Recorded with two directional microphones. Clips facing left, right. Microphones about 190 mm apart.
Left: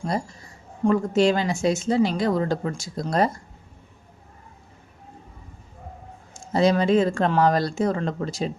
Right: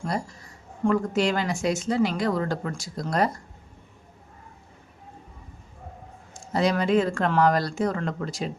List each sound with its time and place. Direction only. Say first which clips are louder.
0.9 s a woman's voice: left 4 dB; 25° left (ahead or behind)
6.3 s a woman's voice: left 4 dB; 25° left (ahead or behind)